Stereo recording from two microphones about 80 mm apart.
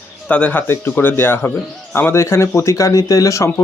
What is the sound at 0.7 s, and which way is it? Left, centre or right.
Speech, left.